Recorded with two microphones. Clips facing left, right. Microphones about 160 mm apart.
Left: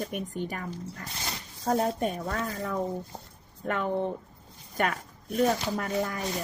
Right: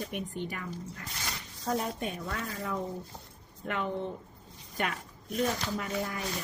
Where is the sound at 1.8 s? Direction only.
45° left (ahead or behind).